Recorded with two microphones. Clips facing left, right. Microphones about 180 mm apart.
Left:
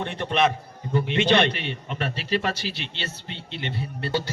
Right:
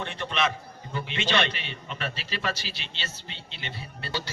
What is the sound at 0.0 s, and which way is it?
A man's voice, 55° left (ahead or behind).